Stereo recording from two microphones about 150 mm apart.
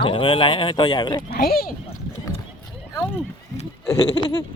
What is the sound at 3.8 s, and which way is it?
Goat, 25° left (ahead or behind).